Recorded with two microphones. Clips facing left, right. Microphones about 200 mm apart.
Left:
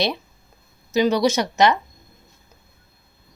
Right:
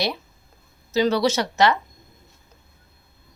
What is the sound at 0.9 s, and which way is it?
Speech, 15° left (ahead or behind).